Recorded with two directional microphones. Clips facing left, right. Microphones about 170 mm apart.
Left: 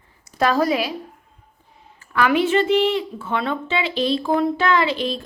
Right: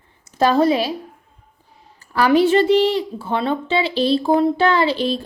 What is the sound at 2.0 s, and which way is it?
A woman's voice, 35° right (ahead or behind).